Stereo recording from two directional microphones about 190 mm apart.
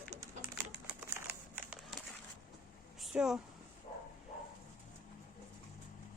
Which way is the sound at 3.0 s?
5° right (ahead or behind).